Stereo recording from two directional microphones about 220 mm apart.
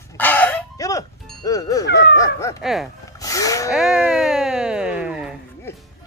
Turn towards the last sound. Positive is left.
turn(degrees=-5)  # may be behind; listen again after turning